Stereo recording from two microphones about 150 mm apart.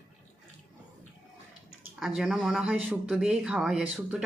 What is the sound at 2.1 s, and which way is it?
Speech, centre (ahead or behind).